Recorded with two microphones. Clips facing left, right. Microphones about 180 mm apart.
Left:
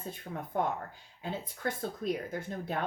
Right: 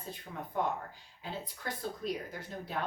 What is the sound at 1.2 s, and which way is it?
A woman's voice, 50° left (ahead or behind).